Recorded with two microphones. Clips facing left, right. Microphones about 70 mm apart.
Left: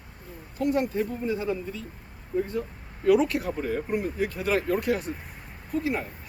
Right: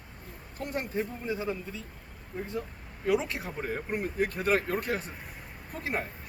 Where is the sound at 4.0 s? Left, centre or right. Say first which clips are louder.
Left 1 dB; right.